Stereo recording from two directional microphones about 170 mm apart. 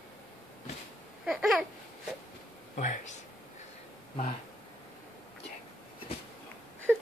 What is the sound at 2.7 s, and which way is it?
Speech, 45° left (ahead or behind).